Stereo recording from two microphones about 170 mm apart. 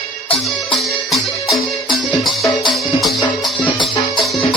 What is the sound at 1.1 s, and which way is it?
Music, centre (ahead or behind).